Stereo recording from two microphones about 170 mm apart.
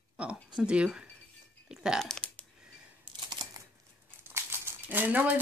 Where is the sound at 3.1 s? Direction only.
25° right (ahead or behind).